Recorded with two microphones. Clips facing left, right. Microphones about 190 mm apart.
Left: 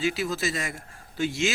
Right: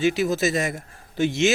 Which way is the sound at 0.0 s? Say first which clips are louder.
Right 6 dB; 20° right (ahead or behind).